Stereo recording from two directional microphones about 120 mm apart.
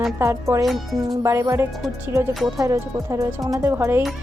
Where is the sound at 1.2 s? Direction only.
20° right (ahead or behind).